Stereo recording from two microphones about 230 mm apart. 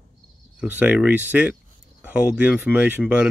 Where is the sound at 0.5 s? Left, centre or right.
Centre.